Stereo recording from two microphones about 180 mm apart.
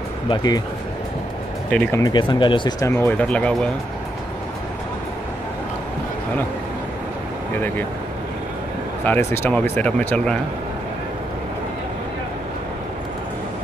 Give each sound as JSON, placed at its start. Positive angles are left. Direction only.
{"t": 0.3, "sound": "speech", "side_deg": 20}
{"t": 1.7, "sound": "speech", "side_deg": 10}
{"t": 2.1, "sound": "speech", "side_deg": 25}
{"t": 2.9, "sound": "speech", "side_deg": 10}
{"t": 7.5, "sound": "speech", "side_deg": 10}
{"t": 9.0, "sound": "speech", "side_deg": 10}